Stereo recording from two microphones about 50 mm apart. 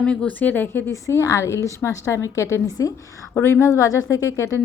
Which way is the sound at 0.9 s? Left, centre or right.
Left.